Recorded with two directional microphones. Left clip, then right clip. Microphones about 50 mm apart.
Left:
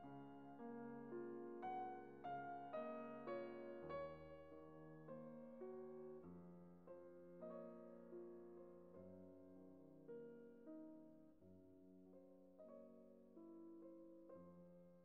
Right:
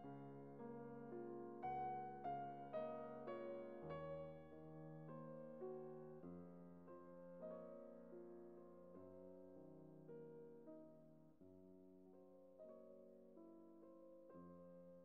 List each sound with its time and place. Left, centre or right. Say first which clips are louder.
0.0 s music: right 1 dB; centre
3.4 s music: right 1 dB; centre